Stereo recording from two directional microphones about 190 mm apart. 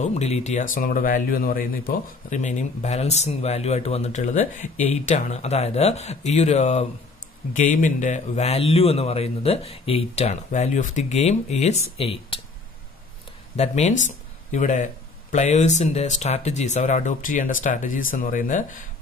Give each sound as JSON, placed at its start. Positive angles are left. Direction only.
{"t": 0.0, "sound": "speech", "side_deg": 35}
{"t": 13.6, "sound": "speech", "side_deg": 35}